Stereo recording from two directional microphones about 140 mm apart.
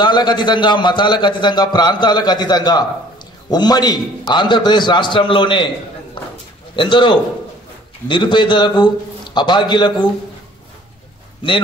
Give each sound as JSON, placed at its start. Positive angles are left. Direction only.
{"t": 0.0, "sound": "a man's voice", "side_deg": 30}
{"t": 6.7, "sound": "a man's voice", "side_deg": 35}
{"t": 11.4, "sound": "a man's voice", "side_deg": 35}